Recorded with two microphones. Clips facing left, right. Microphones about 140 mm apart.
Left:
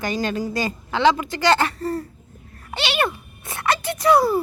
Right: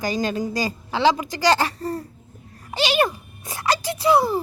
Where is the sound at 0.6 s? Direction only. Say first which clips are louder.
Left 3 dB; 35° right (ahead or behind).